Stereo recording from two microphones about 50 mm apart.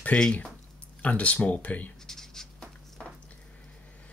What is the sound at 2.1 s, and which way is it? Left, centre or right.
Writing, centre.